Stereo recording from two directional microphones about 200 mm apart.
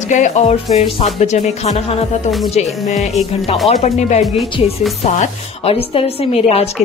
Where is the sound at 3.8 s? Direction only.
35° left (ahead or behind).